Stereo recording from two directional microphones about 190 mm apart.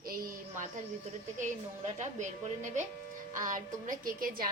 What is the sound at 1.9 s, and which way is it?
A woman's voice, 40° right (ahead or behind).